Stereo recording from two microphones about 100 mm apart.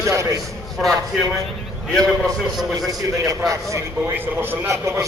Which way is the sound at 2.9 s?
35° right (ahead or behind).